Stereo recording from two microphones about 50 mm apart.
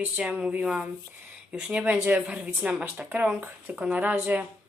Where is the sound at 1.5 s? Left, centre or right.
Right.